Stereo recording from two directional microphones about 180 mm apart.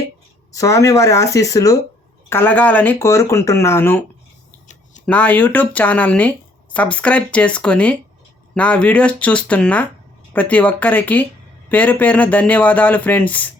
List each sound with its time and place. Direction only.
0.5 s speech: 20° left (ahead or behind)
5.0 s speech: 10° left (ahead or behind)